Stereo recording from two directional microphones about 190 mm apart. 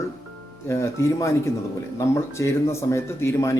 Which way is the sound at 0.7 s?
15° left (ahead or behind).